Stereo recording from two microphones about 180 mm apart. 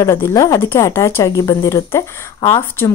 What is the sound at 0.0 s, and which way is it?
Speech, 15° left (ahead or behind).